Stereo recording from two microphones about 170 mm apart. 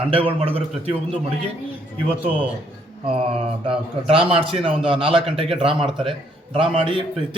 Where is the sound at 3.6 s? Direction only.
30° right (ahead or behind).